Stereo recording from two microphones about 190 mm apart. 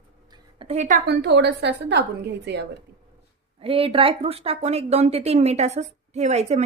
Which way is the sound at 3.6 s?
30° right (ahead or behind).